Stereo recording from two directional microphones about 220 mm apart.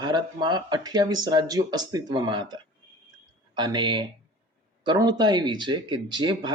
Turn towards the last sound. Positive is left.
turn(degrees=-20)  # may be behind; listen again after turning